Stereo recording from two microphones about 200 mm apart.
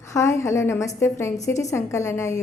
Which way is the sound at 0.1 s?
15° left (ahead or behind).